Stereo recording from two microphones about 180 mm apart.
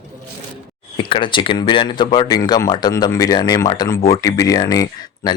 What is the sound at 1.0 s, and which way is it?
Speech, 30° left (ahead or behind).